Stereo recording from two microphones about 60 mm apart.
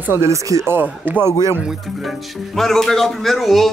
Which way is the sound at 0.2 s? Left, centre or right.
Right.